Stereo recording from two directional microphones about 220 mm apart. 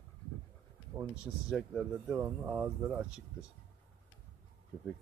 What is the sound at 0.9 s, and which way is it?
Speech, 10° right (ahead or behind).